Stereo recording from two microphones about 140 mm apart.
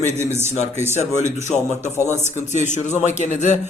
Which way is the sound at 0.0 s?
55° left (ahead or behind).